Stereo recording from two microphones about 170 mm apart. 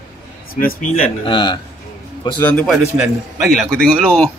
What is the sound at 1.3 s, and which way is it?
Speech, 25° left (ahead or behind).